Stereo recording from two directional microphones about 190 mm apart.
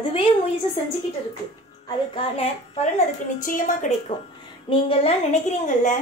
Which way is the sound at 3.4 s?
45° left (ahead or behind).